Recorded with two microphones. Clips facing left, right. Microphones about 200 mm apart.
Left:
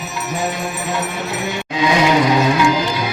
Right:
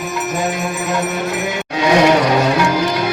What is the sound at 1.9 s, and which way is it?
Music, 60° right (ahead or behind).